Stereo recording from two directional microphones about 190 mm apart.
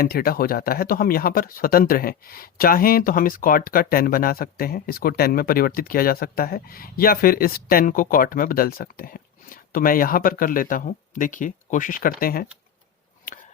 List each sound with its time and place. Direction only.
0.0 s speech: 50° left (ahead or behind)